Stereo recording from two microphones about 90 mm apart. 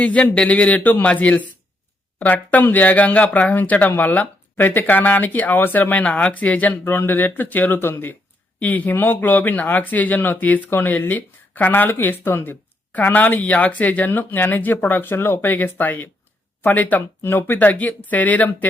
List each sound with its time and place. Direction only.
0.0 s speech: 15° left (ahead or behind)